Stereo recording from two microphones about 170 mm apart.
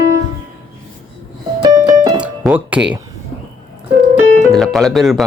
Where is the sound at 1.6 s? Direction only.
20° right (ahead or behind).